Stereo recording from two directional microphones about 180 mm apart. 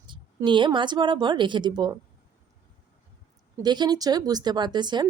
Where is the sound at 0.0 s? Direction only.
25° right (ahead or behind).